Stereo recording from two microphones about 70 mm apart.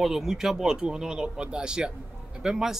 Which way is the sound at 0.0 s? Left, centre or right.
Centre.